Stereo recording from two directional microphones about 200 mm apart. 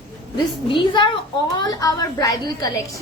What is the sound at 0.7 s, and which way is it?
A woman's voice, 25° left (ahead or behind).